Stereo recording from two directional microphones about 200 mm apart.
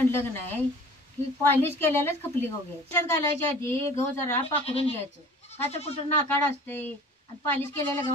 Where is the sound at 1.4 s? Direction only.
10° left (ahead or behind).